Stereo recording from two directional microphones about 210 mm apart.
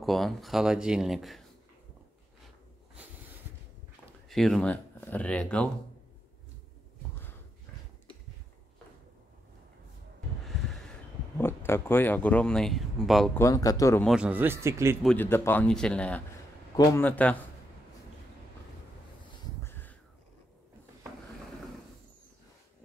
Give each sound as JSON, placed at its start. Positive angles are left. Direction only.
{"t": 0.0, "sound": "speech", "side_deg": 0}
{"t": 4.3, "sound": "speech", "side_deg": 0}
{"t": 10.7, "sound": "speech", "side_deg": 5}
{"t": 13.4, "sound": "speech", "side_deg": 15}
{"t": 14.0, "sound": "a man's voice", "side_deg": -5}
{"t": 15.0, "sound": "speech", "side_deg": 10}
{"t": 19.6, "sound": "a sound", "side_deg": 10}